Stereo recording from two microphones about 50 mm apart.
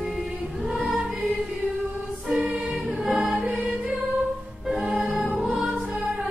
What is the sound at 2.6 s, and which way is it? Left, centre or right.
Choir, centre.